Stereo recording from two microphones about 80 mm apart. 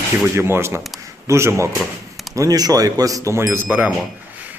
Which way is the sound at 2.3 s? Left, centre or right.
Right.